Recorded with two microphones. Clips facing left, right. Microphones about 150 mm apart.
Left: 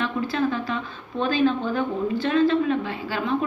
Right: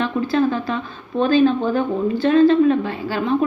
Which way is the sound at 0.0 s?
35° right (ahead or behind).